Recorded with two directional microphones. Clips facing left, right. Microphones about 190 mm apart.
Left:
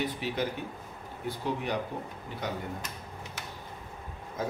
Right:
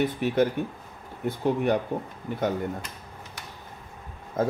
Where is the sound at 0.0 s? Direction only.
50° right (ahead or behind).